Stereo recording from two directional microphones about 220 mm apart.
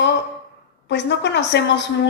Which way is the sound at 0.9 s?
50° left (ahead or behind).